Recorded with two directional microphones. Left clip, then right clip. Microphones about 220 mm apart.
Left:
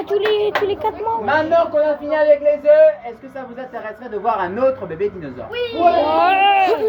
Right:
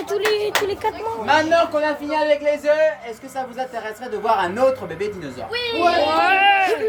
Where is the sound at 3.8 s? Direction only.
50° right (ahead or behind).